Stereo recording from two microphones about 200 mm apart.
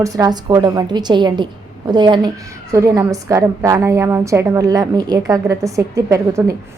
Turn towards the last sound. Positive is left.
turn(degrees=-15)  # may be behind; listen again after turning